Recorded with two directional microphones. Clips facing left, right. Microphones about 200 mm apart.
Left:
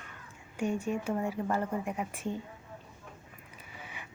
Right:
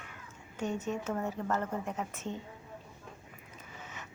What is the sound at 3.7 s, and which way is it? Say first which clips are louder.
Vehicle: left 1 dB; 10° left (ahead or behind).